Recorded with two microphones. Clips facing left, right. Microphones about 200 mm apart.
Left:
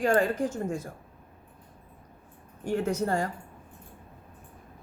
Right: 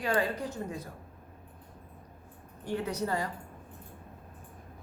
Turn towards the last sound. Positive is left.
turn(degrees=50)  # may be behind; listen again after turning